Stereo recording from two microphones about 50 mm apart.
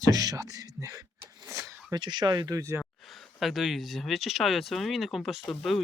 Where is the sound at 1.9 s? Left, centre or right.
Right.